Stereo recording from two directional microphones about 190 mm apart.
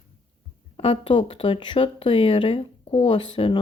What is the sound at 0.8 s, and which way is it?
Speech, 30° left (ahead or behind).